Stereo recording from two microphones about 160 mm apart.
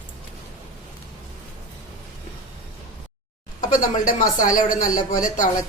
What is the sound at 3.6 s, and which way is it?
A woman's voice, 55° left (ahead or behind).